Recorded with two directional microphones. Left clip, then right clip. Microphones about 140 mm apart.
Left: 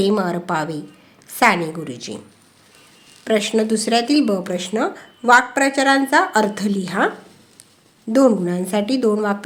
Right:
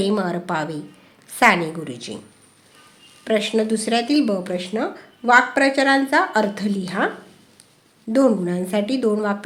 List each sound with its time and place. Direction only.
0.0 s a woman's voice: 15° left (ahead or behind)
3.2 s speech: 20° left (ahead or behind)
8.1 s a woman's voice: 15° left (ahead or behind)